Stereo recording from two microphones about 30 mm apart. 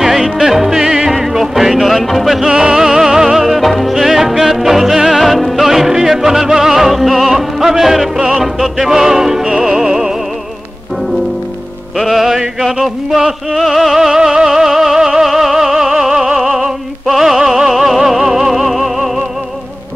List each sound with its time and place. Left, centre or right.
0.0 s music: centre
2.4 s music: right
3.4 s music: centre
12.0 s music: centre
13.9 s music: centre
15.2 s music: centre
16.5 s opera: centre